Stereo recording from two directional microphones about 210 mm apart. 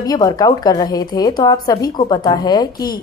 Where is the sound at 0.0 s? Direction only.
20° left (ahead or behind).